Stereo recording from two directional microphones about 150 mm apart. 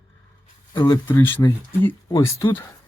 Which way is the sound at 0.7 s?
30° left (ahead or behind).